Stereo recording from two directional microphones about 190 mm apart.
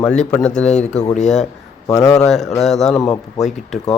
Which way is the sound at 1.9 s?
15° left (ahead or behind).